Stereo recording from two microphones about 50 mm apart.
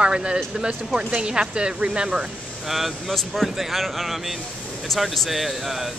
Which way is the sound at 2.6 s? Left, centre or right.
Centre.